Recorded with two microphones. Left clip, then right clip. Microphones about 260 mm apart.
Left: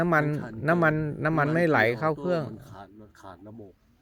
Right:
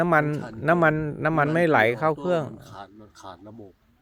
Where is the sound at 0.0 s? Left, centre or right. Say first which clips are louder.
Right 3 dB; centre.